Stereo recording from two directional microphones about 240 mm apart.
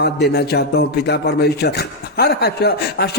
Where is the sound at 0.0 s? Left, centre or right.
Left.